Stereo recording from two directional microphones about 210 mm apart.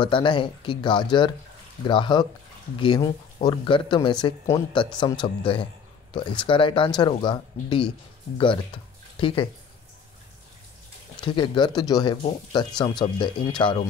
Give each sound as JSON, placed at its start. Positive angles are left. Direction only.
{"t": 0.0, "sound": "speech", "side_deg": 25}
{"t": 11.1, "sound": "speech", "side_deg": 20}